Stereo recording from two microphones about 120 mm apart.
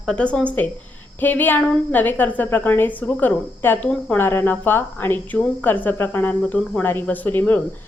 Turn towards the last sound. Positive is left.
turn(degrees=15)  # may be behind; listen again after turning